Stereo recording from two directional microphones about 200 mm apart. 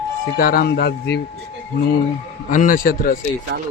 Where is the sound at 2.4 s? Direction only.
40° left (ahead or behind).